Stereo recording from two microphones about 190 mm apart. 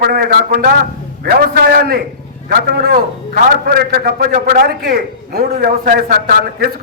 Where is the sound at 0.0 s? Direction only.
50° right (ahead or behind).